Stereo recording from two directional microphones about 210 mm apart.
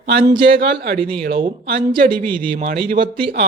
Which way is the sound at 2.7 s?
45° right (ahead or behind).